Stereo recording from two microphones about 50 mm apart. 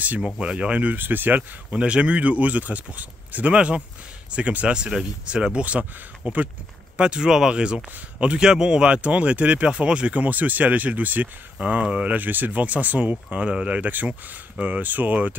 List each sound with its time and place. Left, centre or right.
0.2 s speech: right
1.0 s speech: right
1.8 s speech: right
3.5 s speech: right
7.0 s speech: centre
10.1 s speech: right
12.2 s speech: right